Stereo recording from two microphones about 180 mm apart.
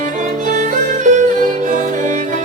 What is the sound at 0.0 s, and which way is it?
Music, 45° right (ahead or behind).